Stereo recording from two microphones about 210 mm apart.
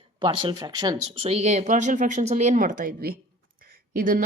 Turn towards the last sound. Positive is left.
turn(degrees=-40)  # may be behind; listen again after turning